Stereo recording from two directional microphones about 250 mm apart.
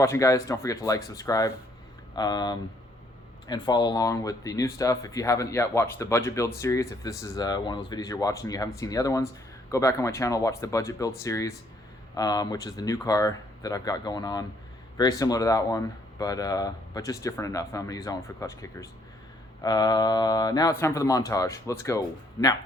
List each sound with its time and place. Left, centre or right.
0.0 s speech: centre